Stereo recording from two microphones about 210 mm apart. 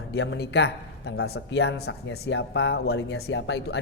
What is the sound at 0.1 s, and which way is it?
A man's voice, 55° left (ahead or behind).